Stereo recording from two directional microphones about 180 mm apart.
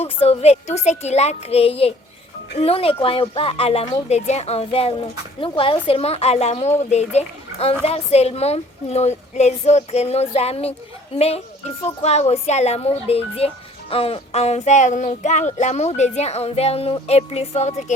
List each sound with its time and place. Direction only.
0.0 s speech: 35° left (ahead or behind)